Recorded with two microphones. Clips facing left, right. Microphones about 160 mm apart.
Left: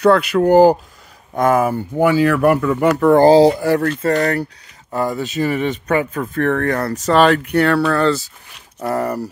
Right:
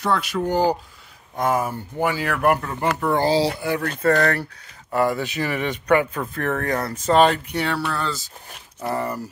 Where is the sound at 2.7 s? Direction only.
75° left (ahead or behind).